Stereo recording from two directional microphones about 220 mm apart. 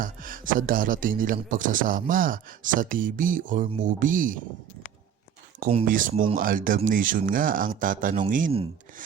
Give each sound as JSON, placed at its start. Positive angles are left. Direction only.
{"t": 0.0, "sound": "speech", "side_deg": -40}
{"t": 5.9, "sound": "speech", "side_deg": -40}